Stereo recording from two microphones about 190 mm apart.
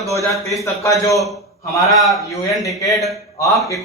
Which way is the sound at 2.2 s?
15° left (ahead or behind).